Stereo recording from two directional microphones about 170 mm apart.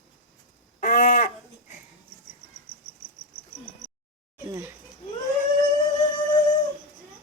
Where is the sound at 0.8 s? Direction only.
50° left (ahead or behind).